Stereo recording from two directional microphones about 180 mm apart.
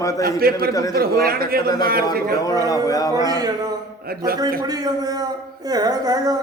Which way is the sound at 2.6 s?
20° left (ahead or behind).